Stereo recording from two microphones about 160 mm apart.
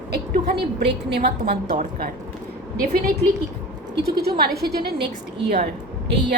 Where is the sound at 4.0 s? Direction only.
85° right.